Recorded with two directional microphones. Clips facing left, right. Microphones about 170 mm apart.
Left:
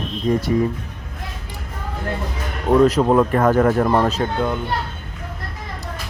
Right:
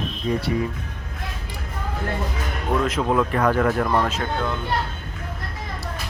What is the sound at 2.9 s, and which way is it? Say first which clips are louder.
Speech: left 6 dB; 40° left (ahead or behind).